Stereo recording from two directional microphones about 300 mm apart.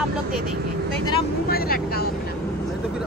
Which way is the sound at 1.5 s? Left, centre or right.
Left.